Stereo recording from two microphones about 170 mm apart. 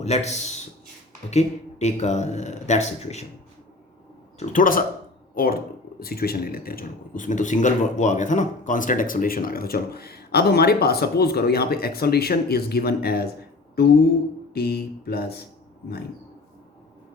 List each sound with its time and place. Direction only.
0.0 s a man's voice: 40° left (ahead or behind)
4.4 s a man's voice: 50° left (ahead or behind); by 13.2 s 65° left (ahead or behind)
13.8 s a sound: 70° left (ahead or behind)
14.5 s speech: 70° left (ahead or behind)